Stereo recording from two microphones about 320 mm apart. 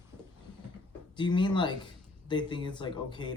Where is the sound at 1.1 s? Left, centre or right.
Centre.